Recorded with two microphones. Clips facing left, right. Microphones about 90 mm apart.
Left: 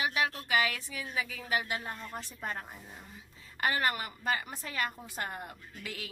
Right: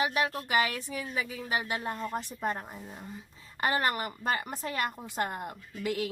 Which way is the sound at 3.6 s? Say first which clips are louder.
Right 2 dB; 35° right (ahead or behind).